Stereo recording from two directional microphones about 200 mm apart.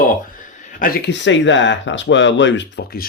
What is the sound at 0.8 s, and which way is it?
Speech, 50° left (ahead or behind).